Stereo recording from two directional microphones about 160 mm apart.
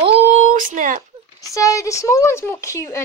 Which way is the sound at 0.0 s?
40° right (ahead or behind).